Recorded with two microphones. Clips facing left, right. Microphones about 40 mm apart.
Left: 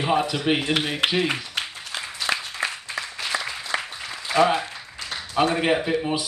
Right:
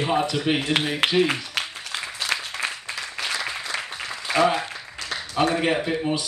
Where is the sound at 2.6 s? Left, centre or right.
Left.